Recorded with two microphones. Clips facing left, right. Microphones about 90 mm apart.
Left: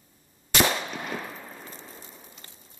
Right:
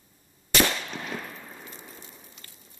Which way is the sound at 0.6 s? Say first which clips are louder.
Left 1 dB; 20° left (ahead or behind).